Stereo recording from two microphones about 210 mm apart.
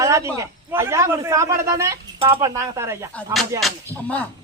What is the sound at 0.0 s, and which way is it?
A man's voice, 15° right (ahead or behind).